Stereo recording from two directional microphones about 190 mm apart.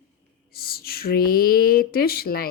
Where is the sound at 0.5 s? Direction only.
55° left (ahead or behind).